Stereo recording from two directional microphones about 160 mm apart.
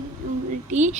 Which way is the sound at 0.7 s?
50° right (ahead or behind).